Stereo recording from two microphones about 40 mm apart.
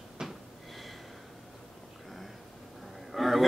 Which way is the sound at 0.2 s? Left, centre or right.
Centre.